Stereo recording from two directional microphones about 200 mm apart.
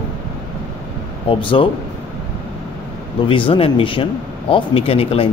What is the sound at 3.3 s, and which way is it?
Speech, 25° left (ahead or behind).